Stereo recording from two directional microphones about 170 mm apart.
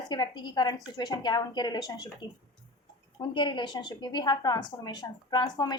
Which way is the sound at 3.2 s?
30° left (ahead or behind).